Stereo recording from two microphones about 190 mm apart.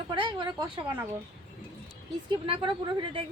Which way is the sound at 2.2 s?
25° right (ahead or behind).